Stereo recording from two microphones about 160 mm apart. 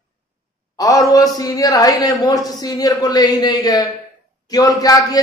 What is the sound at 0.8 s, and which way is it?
A woman's voice, 20° left (ahead or behind).